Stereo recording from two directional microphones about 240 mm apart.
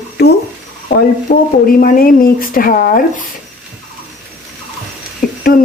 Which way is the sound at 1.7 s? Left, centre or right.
Left.